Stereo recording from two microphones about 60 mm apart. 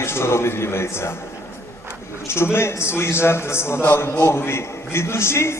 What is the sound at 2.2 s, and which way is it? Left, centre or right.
A man's voice, left.